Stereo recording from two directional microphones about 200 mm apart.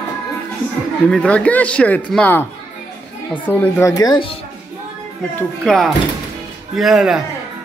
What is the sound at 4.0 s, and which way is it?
Speech, 25° left (ahead or behind).